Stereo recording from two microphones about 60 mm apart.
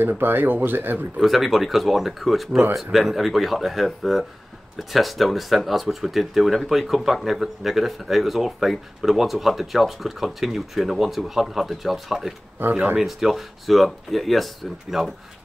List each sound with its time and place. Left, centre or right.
0.2 s speech: right
1.2 s speech: centre